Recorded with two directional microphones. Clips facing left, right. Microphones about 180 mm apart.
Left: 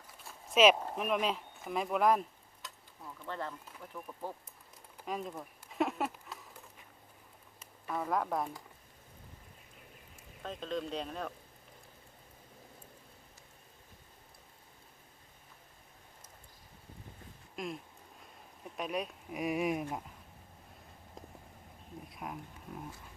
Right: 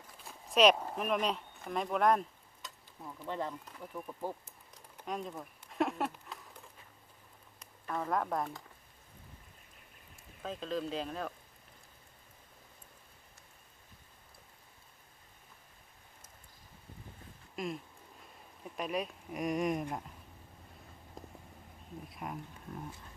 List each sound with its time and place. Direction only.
0.4 s speech: centre (ahead or behind)
3.2 s speech: 15° right (ahead or behind)
5.0 s a sound: 5° left (ahead or behind)
7.6 s speech: 5° left (ahead or behind)
10.4 s speech: centre (ahead or behind)
17.5 s a sound: centre (ahead or behind)
18.2 s speech: centre (ahead or behind)
22.1 s speech: centre (ahead or behind)